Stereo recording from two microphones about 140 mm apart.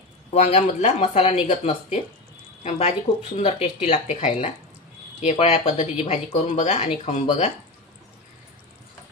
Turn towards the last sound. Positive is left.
turn(degrees=55)  # may be behind; listen again after turning